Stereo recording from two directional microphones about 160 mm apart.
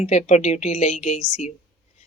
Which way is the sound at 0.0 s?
45° left (ahead or behind).